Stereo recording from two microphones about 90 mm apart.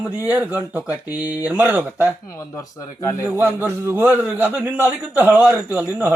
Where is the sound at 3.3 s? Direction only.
20° right (ahead or behind).